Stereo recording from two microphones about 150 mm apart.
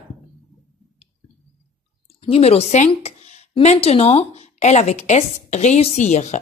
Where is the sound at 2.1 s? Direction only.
40° left (ahead or behind).